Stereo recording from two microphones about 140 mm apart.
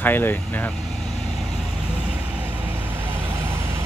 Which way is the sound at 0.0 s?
15° left (ahead or behind).